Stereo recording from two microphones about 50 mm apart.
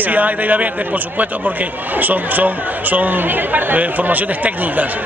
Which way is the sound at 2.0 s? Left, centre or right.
Right.